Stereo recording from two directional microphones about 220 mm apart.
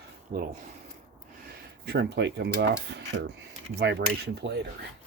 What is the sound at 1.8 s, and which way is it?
Cutlery, 50° right (ahead or behind).